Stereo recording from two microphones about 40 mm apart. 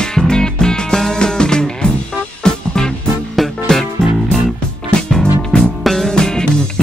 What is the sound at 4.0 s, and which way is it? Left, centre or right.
Music, centre.